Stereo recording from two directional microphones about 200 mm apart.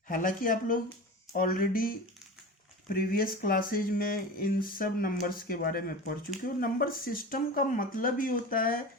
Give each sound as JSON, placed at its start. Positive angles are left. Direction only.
{"t": 0.1, "sound": "speech", "side_deg": 40}